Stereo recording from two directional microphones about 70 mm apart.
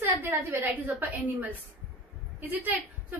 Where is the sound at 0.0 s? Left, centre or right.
Right.